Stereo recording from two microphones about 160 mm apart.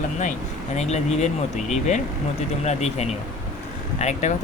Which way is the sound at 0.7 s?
45° left (ahead or behind).